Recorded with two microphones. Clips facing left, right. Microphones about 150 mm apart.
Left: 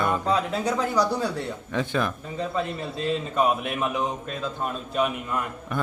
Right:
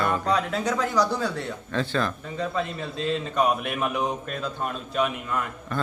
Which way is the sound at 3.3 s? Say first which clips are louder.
Even; centre (ahead or behind).